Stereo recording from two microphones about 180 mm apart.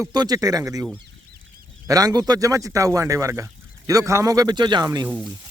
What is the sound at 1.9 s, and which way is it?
Speech, 20° right (ahead or behind).